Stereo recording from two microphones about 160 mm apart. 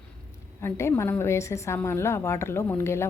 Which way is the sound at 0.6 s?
15° left (ahead or behind).